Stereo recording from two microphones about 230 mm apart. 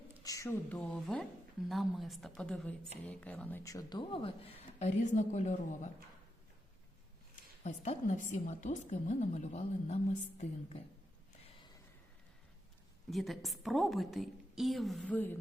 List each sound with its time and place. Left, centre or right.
0.2 s a woman's voice: centre; by 5.9 s left
7.6 s a woman's voice: left
13.1 s a woman's voice: centre